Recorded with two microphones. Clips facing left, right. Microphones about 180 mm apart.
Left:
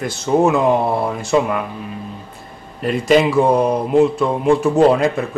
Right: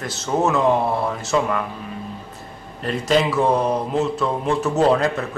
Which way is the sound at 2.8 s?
10° left (ahead or behind).